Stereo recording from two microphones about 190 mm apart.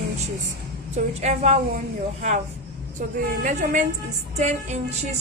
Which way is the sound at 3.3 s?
40° right (ahead or behind).